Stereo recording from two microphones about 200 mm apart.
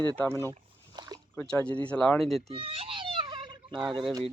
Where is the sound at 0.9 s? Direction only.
20° right (ahead or behind).